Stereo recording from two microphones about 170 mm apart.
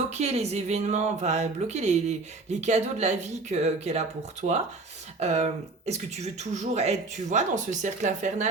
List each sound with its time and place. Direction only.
0.1 s speech: 40° right (ahead or behind)